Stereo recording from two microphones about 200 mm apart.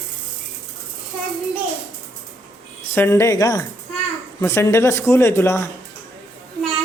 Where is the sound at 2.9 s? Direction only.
15° left (ahead or behind).